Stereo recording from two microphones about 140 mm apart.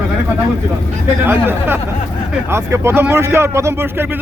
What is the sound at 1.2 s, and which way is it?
A man's voice, 15° right (ahead or behind).